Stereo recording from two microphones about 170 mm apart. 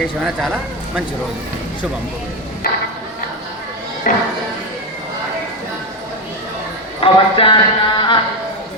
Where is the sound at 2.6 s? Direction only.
65° left (ahead or behind).